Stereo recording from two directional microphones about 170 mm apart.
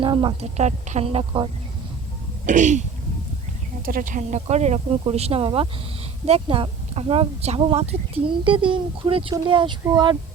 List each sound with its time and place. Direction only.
0.0 s speech: 30° right (ahead or behind)
2.5 s speech: 45° right (ahead or behind)
3.8 s speech: 55° right (ahead or behind); by 10.2 s 25° right (ahead or behind)